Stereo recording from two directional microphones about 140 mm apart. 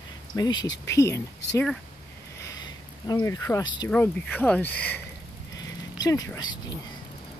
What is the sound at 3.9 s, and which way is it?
Speech, 10° left (ahead or behind).